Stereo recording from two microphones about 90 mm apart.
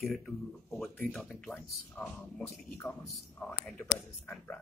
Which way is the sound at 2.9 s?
20° left (ahead or behind).